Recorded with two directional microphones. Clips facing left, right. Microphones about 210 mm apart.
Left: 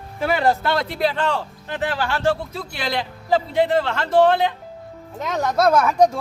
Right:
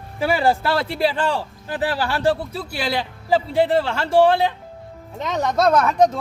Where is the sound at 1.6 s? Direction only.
35° right (ahead or behind).